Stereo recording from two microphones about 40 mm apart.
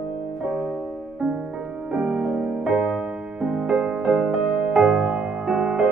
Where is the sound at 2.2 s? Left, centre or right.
Centre.